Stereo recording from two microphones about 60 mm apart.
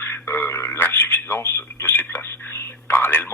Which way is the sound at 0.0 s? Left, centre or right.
Left.